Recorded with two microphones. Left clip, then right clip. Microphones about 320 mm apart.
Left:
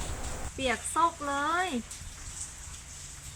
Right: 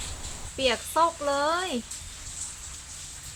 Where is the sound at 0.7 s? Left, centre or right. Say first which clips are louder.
Right 3 dB; centre.